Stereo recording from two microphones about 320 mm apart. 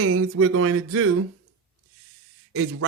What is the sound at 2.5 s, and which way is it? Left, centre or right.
Speech, right.